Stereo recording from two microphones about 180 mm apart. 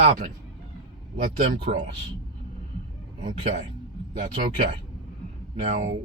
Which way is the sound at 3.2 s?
40° right (ahead or behind).